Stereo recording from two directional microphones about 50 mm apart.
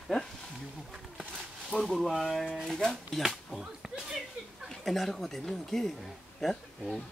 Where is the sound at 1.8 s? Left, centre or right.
Centre.